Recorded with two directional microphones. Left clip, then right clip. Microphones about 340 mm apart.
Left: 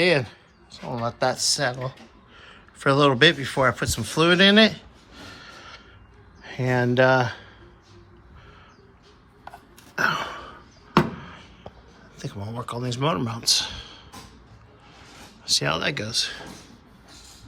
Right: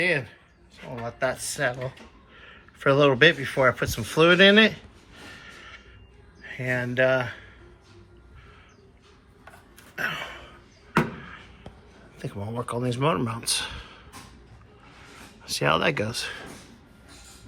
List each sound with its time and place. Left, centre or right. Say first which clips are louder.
0.0 s a sound: left 4 dB; centre
1.2 s speech: left 3 dB; centre
6.6 s speech: left 4 dB; centre
9.9 s a sound: left 6 dB; centre
10.2 s throat clearing: left 5 dB; centre
12.1 s speech: right 2 dB; centre
15.4 s speech: even; centre